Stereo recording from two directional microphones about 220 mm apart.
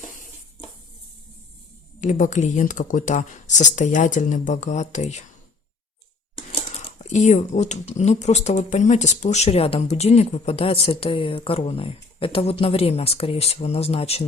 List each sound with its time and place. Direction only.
2.0 s speech: 35° left (ahead or behind)
6.3 s speech: 25° left (ahead or behind)